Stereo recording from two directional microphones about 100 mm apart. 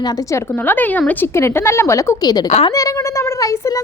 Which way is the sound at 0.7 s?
15° left (ahead or behind).